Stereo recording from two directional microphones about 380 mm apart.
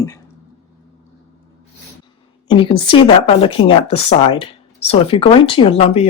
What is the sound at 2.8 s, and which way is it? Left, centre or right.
Speech, centre.